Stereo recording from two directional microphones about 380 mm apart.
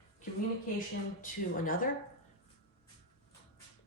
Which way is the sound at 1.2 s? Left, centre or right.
Left.